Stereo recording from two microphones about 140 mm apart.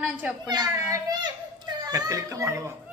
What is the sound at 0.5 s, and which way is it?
A child's voice, 30° right (ahead or behind).